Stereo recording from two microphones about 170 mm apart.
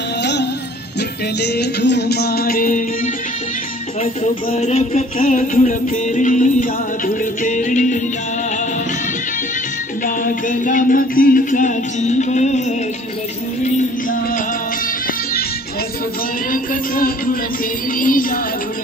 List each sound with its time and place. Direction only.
0.2 s music: 90° left
1.4 s music: 80° left; by 2.8 s 60° left (ahead or behind)
4.0 s music: 40° left (ahead or behind)
10.0 s music: 50° left (ahead or behind)
16.5 s music: 55° left (ahead or behind)